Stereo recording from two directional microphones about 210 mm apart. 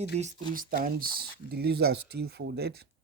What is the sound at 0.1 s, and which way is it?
Speech, 30° right (ahead or behind).